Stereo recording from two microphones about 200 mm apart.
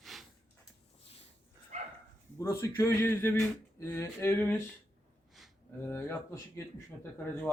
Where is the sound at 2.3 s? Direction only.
15° left (ahead or behind).